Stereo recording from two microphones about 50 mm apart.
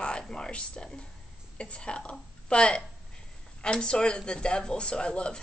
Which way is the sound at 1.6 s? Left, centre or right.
Left.